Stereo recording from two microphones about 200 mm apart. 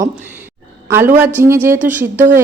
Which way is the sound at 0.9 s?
10° right (ahead or behind).